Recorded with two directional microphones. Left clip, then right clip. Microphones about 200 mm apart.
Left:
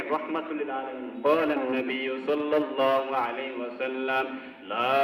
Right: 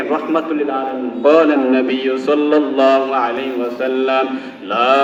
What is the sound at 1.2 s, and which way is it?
A man's voice, 55° right (ahead or behind).